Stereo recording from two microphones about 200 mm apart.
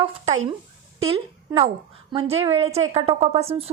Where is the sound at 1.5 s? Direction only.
20° right (ahead or behind).